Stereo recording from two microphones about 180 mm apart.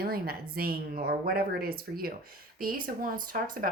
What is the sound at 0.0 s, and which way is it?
Speech, 55° right (ahead or behind).